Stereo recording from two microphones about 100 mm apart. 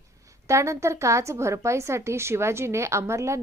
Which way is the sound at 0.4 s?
30° right (ahead or behind).